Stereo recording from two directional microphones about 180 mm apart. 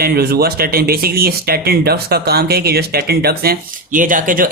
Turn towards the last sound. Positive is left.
turn(degrees=-50)  # may be behind; listen again after turning